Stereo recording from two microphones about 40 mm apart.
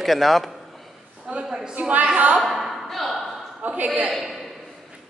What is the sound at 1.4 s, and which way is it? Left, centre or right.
Speech, centre.